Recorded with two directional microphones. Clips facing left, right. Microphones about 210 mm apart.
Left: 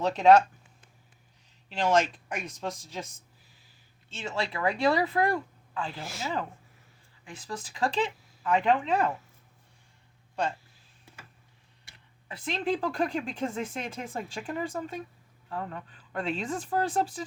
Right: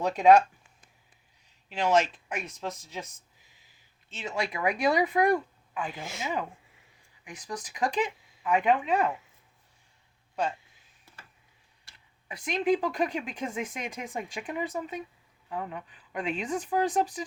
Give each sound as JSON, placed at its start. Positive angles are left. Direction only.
{"t": 0.0, "sound": "speech", "side_deg": -10}
{"t": 1.7, "sound": "speech", "side_deg": -10}
{"t": 4.2, "sound": "speech", "side_deg": -15}
{"t": 12.5, "sound": "speech", "side_deg": -10}